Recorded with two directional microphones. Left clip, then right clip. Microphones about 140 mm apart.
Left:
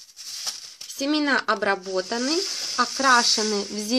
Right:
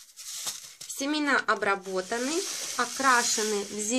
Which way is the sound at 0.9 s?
45° left (ahead or behind).